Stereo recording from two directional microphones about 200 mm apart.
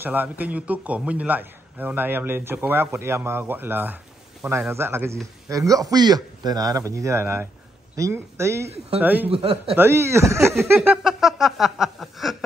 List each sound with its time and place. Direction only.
0.0 s a man's voice: 10° right (ahead or behind)
9.3 s a man's voice: 30° right (ahead or behind)
9.8 s a man's voice: 15° right (ahead or behind)
10.6 s a sound: 10° right (ahead or behind)